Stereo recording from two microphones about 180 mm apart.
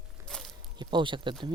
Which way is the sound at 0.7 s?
25° right (ahead or behind).